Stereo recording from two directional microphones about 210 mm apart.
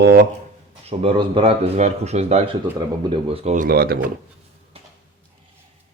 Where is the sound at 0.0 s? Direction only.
45° right (ahead or behind).